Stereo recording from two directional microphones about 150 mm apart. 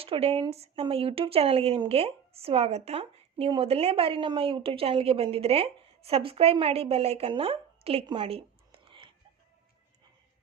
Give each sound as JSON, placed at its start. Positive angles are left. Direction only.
{"t": 0.0, "sound": "speech", "side_deg": -40}